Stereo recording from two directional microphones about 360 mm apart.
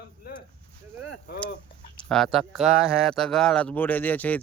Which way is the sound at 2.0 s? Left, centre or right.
Centre.